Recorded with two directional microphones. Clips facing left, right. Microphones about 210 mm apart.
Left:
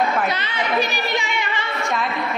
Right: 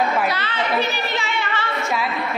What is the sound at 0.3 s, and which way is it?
A child's voice, 15° left (ahead or behind).